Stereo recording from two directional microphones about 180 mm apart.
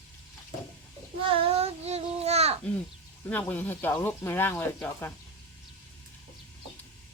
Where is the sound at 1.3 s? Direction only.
30° right (ahead or behind).